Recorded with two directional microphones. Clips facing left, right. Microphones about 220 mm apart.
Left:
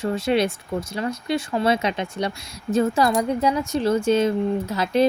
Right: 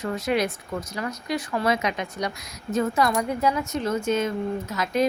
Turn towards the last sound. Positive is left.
turn(degrees=30)  # may be behind; listen again after turning